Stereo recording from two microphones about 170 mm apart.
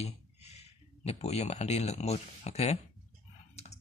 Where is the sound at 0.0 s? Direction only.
40° left (ahead or behind).